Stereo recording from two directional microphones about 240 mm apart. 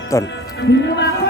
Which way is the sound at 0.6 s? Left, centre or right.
Left.